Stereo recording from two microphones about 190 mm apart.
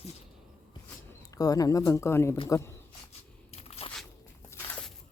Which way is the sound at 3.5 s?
30° left (ahead or behind).